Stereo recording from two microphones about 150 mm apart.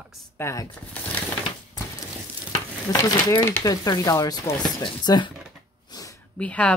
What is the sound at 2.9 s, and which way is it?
Speech, 25° left (ahead or behind).